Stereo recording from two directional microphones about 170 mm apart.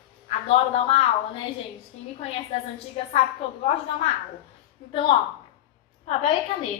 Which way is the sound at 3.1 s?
35° left (ahead or behind).